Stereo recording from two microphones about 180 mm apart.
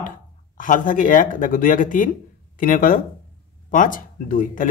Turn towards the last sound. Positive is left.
turn(degrees=50)  # may be behind; listen again after turning